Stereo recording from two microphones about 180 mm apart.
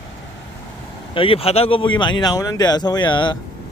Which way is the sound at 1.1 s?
30° left (ahead or behind).